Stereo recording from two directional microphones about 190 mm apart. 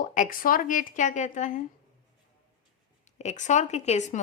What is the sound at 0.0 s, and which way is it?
Speech, 45° left (ahead or behind).